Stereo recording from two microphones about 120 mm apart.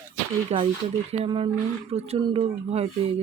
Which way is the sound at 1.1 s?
65° right (ahead or behind).